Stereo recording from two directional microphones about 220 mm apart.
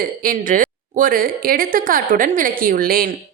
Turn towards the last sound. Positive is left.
turn(degrees=-40)  # may be behind; listen again after turning